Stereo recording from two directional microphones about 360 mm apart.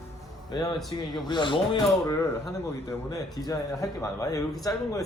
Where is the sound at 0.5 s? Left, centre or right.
Centre.